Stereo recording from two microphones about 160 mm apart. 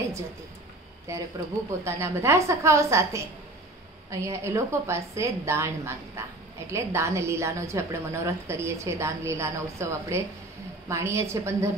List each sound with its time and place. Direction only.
1.1 s a woman's voice: 20° right (ahead or behind)